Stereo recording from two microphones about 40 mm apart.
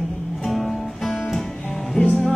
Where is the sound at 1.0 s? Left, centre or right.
Centre.